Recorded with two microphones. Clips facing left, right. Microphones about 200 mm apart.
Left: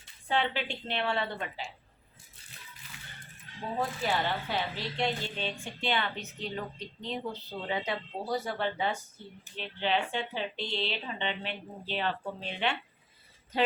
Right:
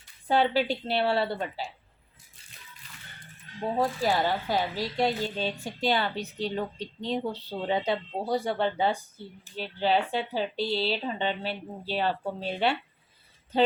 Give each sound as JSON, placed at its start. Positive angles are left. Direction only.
{"t": 0.3, "sound": "speech", "side_deg": -40}
{"t": 3.8, "sound": "speech", "side_deg": -40}